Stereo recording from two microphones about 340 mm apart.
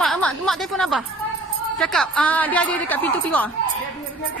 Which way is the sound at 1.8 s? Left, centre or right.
Centre.